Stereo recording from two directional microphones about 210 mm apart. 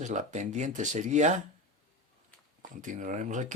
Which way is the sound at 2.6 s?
35° right (ahead or behind).